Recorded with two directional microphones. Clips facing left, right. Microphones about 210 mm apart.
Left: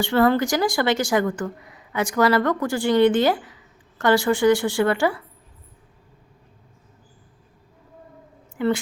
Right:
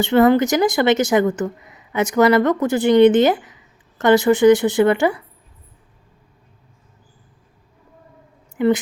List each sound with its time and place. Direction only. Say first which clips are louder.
0.0 s speech: right 5 dB; 20° right (ahead or behind)
8.5 s speech: right 5 dB; 20° right (ahead or behind)